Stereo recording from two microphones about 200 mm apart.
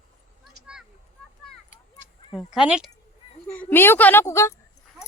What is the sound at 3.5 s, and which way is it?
A woman's voice, 10° left (ahead or behind).